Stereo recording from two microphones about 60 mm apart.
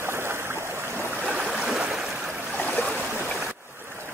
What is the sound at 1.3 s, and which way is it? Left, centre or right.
Stream, centre.